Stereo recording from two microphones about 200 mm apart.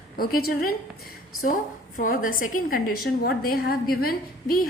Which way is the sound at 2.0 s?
45° left (ahead or behind).